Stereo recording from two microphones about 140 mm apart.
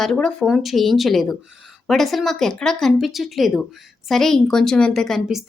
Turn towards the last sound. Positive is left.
turn(degrees=0)  # may be behind; listen again after turning